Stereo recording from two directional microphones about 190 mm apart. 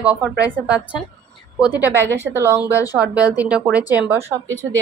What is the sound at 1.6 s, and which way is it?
A woman's voice, 10° right (ahead or behind).